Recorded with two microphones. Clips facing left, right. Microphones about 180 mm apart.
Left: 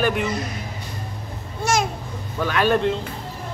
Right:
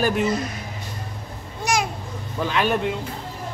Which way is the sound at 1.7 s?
15° right (ahead or behind).